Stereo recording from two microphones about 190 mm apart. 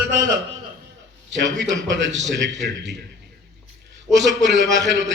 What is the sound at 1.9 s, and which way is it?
A man's voice, 70° right (ahead or behind).